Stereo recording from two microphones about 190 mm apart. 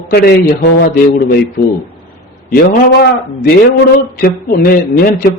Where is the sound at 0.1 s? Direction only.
55° left (ahead or behind).